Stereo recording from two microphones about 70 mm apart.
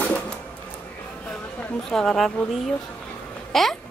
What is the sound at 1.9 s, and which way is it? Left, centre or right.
Speech, centre.